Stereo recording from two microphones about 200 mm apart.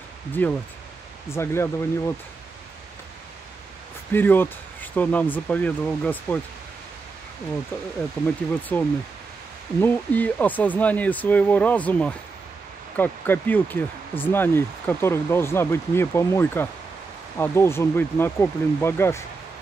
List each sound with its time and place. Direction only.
0.3 s speech: 10° left (ahead or behind)
4.1 s speech: 10° left (ahead or behind)
8.7 s speech: 10° left (ahead or behind)